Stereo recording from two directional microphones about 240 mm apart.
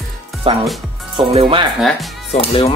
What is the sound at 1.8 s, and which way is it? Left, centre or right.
Speech, centre.